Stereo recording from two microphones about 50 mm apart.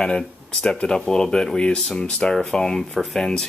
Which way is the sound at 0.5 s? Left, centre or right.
Centre.